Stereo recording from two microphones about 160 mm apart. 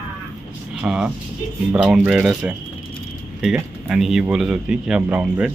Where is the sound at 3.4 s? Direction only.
Centre (ahead or behind).